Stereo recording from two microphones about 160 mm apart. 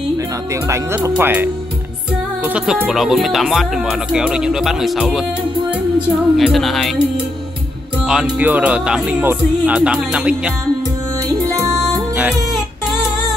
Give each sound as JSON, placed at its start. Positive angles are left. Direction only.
{"t": 0.7, "sound": "speech", "side_deg": -20}
{"t": 6.3, "sound": "speech", "side_deg": 0}
{"t": 8.1, "sound": "speech", "side_deg": -10}
{"t": 11.4, "sound": "music", "side_deg": -20}
{"t": 11.7, "sound": "music", "side_deg": -5}